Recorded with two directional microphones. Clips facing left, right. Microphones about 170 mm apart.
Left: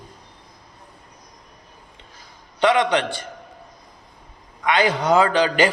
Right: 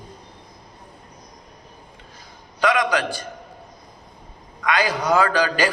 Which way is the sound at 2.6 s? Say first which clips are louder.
Left 2 dB; 30° left (ahead or behind).